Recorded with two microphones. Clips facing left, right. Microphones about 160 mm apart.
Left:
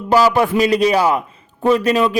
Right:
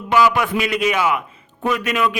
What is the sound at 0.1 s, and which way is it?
A man's voice, 35° left (ahead or behind).